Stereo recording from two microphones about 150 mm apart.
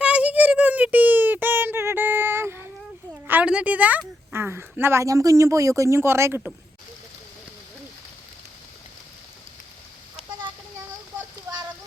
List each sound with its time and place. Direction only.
0.0 s child singing: 10° right (ahead or behind)
3.2 s a woman's voice: 10° right (ahead or behind)